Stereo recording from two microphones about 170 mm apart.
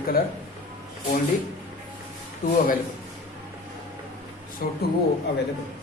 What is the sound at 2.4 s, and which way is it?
Speech, 50° left (ahead or behind).